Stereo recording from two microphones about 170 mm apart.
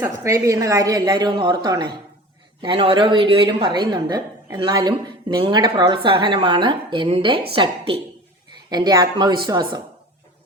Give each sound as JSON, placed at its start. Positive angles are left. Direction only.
{"t": 0.0, "sound": "a woman's voice", "side_deg": -15}